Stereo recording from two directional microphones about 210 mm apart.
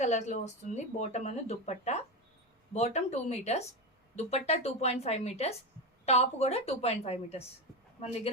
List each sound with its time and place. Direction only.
0.0 s a woman's voice: 35° left (ahead or behind)